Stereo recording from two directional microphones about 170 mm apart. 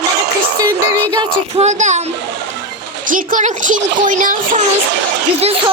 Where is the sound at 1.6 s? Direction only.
45° right (ahead or behind).